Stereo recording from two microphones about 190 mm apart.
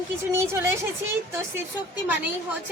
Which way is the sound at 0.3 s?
15° right (ahead or behind).